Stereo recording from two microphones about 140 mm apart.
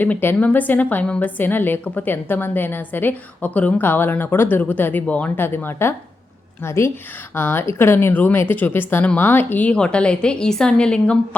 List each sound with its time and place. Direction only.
0.0 s a woman's voice: 15° left (ahead or behind)